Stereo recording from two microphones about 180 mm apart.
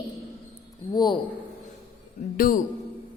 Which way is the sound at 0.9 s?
25° left (ahead or behind).